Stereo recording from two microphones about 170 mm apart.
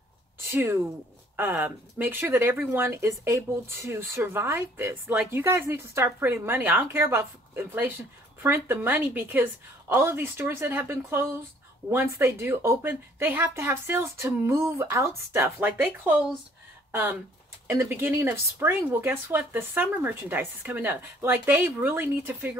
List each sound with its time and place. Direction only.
0.5 s speech: 15° right (ahead or behind)